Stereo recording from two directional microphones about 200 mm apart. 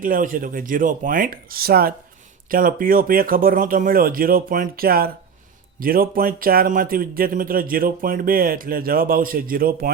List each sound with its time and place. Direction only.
0.0 s speech: 45° right (ahead or behind)